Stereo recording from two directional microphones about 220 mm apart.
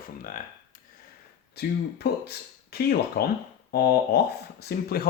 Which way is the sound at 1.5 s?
45° left (ahead or behind).